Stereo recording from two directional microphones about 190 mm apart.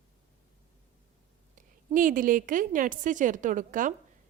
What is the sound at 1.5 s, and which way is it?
A woman's voice, 45° right (ahead or behind).